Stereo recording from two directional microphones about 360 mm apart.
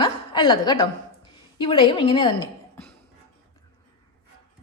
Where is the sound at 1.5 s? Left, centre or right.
Centre.